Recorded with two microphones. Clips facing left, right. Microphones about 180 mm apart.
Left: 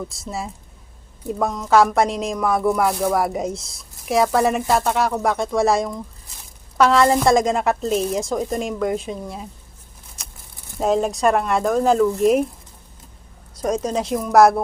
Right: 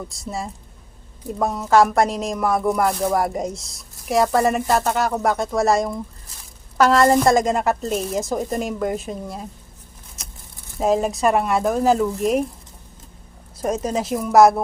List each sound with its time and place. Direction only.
0.1 s speech: centre (ahead or behind)
10.2 s a sound: centre (ahead or behind)
10.8 s speech: centre (ahead or behind)
13.7 s speech: 5° right (ahead or behind)